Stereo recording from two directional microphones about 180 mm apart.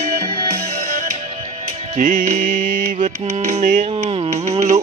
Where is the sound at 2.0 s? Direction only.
45° right (ahead or behind).